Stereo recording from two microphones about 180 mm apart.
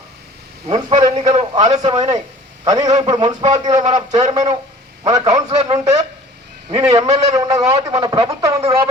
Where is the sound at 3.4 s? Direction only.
20° right (ahead or behind).